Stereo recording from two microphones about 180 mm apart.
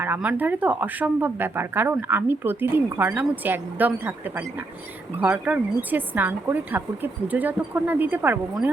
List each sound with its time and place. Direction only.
0.0 s speech: 10° right (ahead or behind)